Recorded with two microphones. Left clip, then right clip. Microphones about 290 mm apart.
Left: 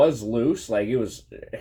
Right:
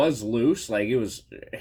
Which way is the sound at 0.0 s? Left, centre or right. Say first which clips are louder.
Left 3 dB; right.